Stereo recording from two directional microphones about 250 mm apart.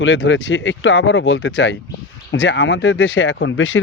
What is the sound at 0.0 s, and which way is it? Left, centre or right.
Speech, left.